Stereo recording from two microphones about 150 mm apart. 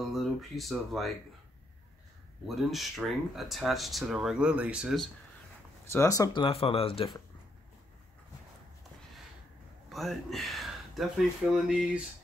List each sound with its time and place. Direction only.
0.1 s speech: centre (ahead or behind)
2.4 s speech: centre (ahead or behind)
5.9 s speech: 20° left (ahead or behind)
6.4 s speech: 40° left (ahead or behind)
9.8 s speech: centre (ahead or behind)